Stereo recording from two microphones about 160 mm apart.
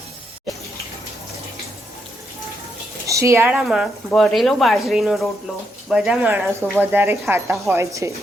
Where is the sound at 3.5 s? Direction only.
5° right (ahead or behind).